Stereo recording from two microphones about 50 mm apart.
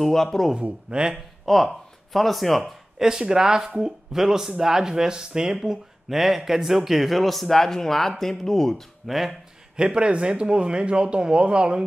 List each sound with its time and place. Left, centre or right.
0.0 s speech: centre
0.6 s speech: right
1.1 s speech: centre
2.6 s speech: centre
9.1 s speech: centre
9.8 s speech: centre